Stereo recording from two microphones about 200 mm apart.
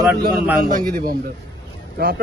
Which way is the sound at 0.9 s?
45° right (ahead or behind).